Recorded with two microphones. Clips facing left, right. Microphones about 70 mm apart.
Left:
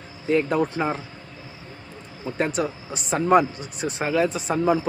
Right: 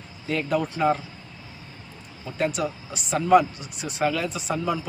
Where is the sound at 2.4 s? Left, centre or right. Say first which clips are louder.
Left 1 dB; left.